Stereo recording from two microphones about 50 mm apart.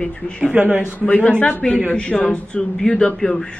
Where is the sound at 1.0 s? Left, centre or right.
Left.